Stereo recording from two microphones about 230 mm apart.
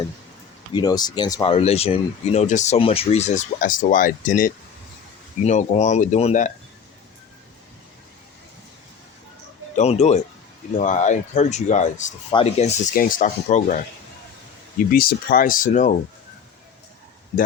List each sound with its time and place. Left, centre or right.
0.7 s speech: centre
9.7 s speech: left
14.9 s speech: left